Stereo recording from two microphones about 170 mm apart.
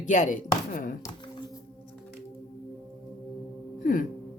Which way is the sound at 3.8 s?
55° left (ahead or behind).